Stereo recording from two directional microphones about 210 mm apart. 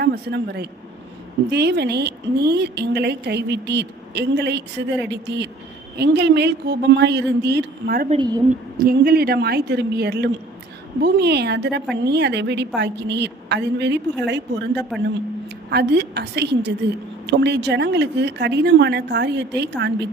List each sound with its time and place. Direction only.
0.0 s a woman's voice: 50° right (ahead or behind)
8.1 s a woman's voice: 20° right (ahead or behind)
8.8 s a woman's voice: 45° right (ahead or behind)
14.9 s a man's voice: centre (ahead or behind)
15.7 s a woman's voice: 55° right (ahead or behind)